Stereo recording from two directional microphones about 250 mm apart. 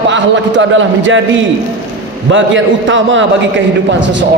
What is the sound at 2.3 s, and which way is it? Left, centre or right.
Speech, right.